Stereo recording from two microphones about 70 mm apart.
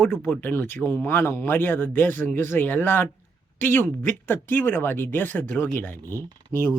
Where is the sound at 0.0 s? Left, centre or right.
Left.